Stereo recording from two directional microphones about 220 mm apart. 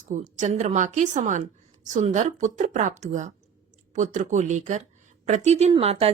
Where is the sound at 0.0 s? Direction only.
35° right (ahead or behind).